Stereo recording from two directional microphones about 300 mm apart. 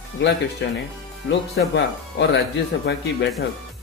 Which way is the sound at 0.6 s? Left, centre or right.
Left.